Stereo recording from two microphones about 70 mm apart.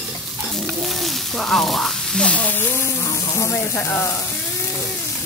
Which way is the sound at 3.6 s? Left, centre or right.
Left.